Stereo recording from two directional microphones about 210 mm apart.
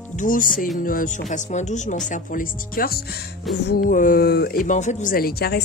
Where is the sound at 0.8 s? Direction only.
40° left (ahead or behind).